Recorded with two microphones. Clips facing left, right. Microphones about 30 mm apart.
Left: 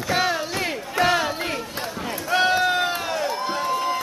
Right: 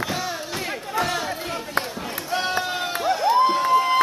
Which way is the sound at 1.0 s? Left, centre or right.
Left.